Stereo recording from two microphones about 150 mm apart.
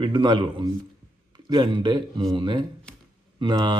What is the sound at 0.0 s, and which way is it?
Speech, 30° right (ahead or behind).